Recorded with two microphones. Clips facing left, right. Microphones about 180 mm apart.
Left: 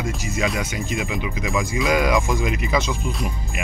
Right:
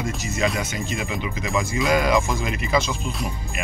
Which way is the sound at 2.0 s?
15° left (ahead or behind).